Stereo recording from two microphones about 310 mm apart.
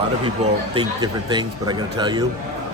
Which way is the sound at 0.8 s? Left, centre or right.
Centre.